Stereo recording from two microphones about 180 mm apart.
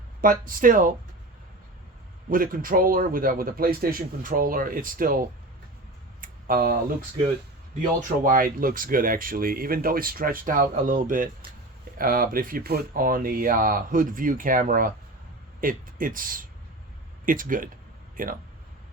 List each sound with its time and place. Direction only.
0.2 s speech: 50° right (ahead or behind)
2.3 s speech: 50° right (ahead or behind)
6.2 s a sound: 50° right (ahead or behind)
7.8 s speech: 50° right (ahead or behind)